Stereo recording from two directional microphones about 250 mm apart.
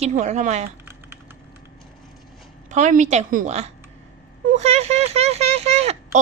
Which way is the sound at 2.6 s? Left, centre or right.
Right.